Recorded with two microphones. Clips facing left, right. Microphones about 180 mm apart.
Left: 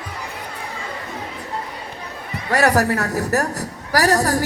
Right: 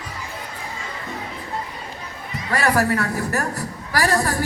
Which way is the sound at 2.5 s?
40° left (ahead or behind).